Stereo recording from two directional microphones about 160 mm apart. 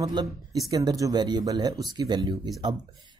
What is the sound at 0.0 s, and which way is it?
Speech, 25° right (ahead or behind).